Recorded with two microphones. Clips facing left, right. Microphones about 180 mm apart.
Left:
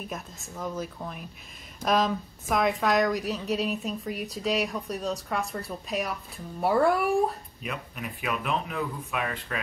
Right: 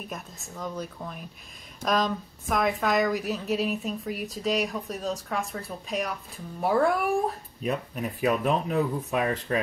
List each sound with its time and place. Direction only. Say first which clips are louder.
0.1 s a woman's voice: left 1 dB; centre (ahead or behind)
7.6 s speech: right 7 dB; 35° right (ahead or behind)